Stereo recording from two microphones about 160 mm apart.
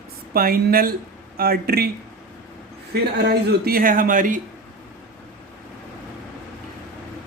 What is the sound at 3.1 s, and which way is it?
Speech, 90° right.